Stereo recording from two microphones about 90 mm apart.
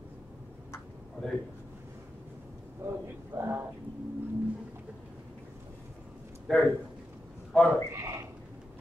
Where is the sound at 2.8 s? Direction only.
25° right (ahead or behind).